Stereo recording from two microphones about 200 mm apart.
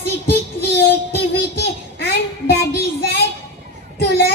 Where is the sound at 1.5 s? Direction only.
55° left (ahead or behind).